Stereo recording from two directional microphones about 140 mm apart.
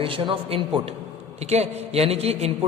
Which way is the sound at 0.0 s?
40° right (ahead or behind).